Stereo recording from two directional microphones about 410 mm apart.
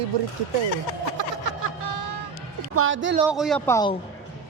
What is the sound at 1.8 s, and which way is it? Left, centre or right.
Music, right.